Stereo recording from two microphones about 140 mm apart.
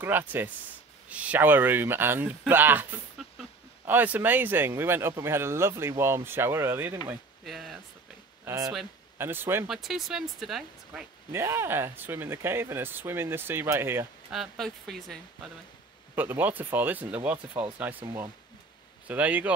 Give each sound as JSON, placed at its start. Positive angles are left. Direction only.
{"t": 0.0, "sound": "speech", "side_deg": -15}
{"t": 7.4, "sound": "speech", "side_deg": 0}
{"t": 8.5, "sound": "speech", "side_deg": -25}
{"t": 9.7, "sound": "speech", "side_deg": 0}
{"t": 11.3, "sound": "speech", "side_deg": -20}
{"t": 14.3, "sound": "speech", "side_deg": 0}
{"t": 16.2, "sound": "speech", "side_deg": -10}